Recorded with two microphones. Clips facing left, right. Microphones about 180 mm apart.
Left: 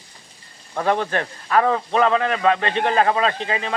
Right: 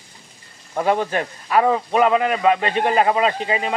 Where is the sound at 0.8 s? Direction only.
10° right (ahead or behind).